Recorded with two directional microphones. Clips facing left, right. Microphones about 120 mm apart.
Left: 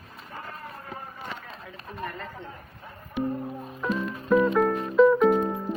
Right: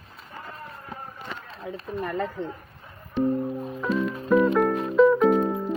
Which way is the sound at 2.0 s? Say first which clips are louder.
Right 7 dB; 65° right (ahead or behind).